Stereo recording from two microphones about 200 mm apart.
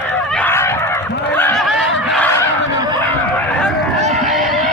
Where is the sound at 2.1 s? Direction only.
10° left (ahead or behind).